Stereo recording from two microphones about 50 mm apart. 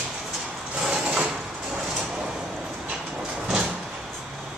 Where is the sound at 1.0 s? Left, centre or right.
Right.